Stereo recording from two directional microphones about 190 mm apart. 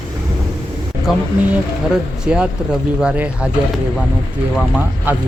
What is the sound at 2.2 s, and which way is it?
Speech, 5° right (ahead or behind).